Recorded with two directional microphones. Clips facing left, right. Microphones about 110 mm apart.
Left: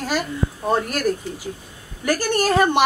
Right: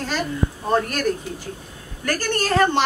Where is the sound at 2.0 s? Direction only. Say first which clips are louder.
Left 3 dB; 10° left (ahead or behind).